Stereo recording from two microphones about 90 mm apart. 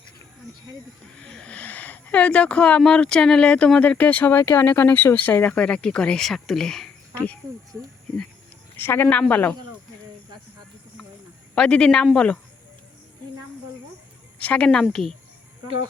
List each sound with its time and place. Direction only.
1.2 s speech: 10° left (ahead or behind)
8.7 s speech: 25° left (ahead or behind)
11.5 s speech: 10° left (ahead or behind)
14.3 s speech: 15° left (ahead or behind)
15.6 s speech: 65° right (ahead or behind)